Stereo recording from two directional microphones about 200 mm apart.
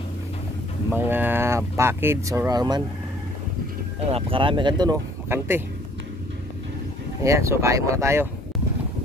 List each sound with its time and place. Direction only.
0.8 s speech: 10° right (ahead or behind)
4.1 s speech: 25° right (ahead or behind)
7.2 s speech: 15° right (ahead or behind)